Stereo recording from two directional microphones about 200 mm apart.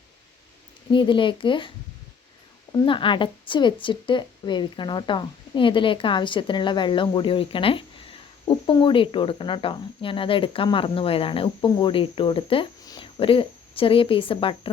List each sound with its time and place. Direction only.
0.9 s speech: 25° left (ahead or behind)
2.8 s speech: 25° left (ahead or behind)